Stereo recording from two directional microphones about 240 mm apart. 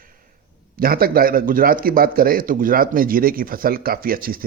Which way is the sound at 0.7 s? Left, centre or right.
Right.